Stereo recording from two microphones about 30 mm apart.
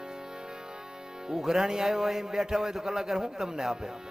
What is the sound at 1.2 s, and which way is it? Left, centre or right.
A man's voice, centre.